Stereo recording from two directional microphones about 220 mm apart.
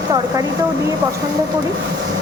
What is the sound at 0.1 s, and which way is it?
Speech, 15° right (ahead or behind).